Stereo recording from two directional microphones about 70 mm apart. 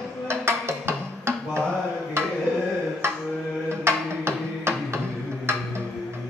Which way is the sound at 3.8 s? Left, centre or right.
Right.